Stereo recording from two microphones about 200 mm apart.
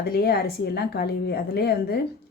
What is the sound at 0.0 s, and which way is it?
Speech, 50° left (ahead or behind).